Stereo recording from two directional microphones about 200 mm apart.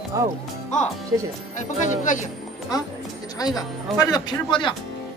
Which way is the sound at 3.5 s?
20° left (ahead or behind).